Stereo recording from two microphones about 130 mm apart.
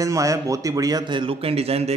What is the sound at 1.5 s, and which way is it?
Speech, 50° right (ahead or behind).